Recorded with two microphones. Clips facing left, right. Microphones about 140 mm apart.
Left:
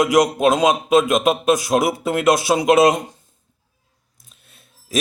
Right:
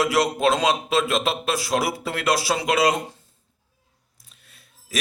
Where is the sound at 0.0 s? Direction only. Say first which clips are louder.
Left 5 dB; 15° left (ahead or behind).